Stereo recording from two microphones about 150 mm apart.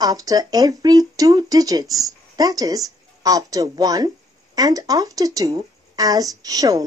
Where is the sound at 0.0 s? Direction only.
25° right (ahead or behind).